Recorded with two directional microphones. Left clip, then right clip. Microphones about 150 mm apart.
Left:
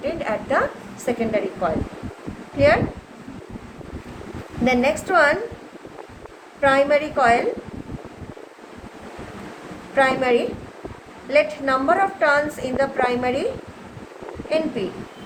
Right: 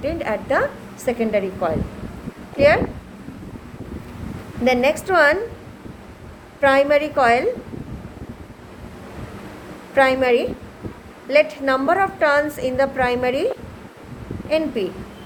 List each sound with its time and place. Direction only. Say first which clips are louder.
0.0 s a woman's voice: right 1 dB; 55° right (ahead or behind)
4.6 s a woman's voice: right 2 dB; 60° right (ahead or behind)
6.6 s a woman's voice: right 2 dB; 70° right (ahead or behind)
9.9 s a woman's voice: right 2 dB; 70° right (ahead or behind)
14.5 s a woman's voice: right 2 dB; 70° right (ahead or behind)